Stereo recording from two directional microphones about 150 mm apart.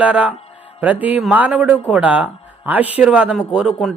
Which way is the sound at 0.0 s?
10° right (ahead or behind).